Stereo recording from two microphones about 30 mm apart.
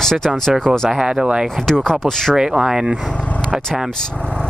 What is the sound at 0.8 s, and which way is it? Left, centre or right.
Speech, right.